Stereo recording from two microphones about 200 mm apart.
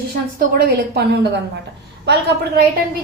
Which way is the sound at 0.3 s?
45° right (ahead or behind).